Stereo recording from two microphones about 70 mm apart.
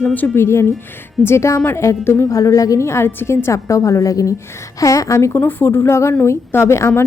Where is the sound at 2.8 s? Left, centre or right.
Left.